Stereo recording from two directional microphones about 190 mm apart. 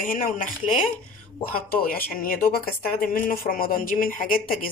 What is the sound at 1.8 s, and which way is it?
Speech, 50° left (ahead or behind).